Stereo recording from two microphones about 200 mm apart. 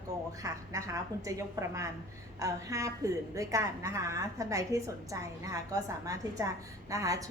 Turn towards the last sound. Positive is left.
turn(degrees=-15)  # may be behind; listen again after turning